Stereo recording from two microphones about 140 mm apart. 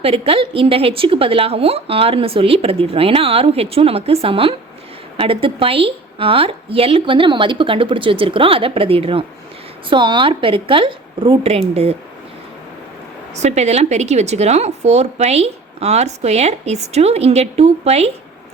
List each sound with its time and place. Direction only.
0.0 s a woman's voice: 40° right (ahead or behind)
13.3 s speech: 55° right (ahead or behind)